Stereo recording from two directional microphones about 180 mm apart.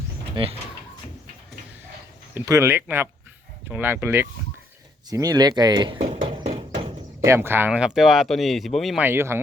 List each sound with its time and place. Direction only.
0.4 s speech: 30° right (ahead or behind)
2.3 s speech: 15° right (ahead or behind)
6.2 s horse: 35° right (ahead or behind)
7.3 s speech: 10° right (ahead or behind)
9.0 s speech: 15° right (ahead or behind)